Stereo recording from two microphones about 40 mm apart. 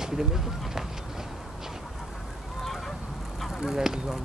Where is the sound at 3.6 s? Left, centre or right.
Centre.